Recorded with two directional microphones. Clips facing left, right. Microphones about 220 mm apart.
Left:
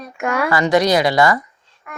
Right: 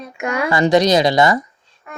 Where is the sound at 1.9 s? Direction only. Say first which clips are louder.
Right 1 dB; 25° right (ahead or behind).